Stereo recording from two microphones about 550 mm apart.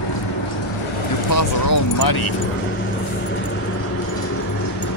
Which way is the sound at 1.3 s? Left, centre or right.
Left.